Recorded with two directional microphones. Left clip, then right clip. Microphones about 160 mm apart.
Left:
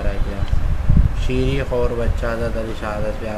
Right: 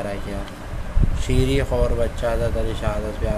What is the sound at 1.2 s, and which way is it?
Speech, 20° right (ahead or behind).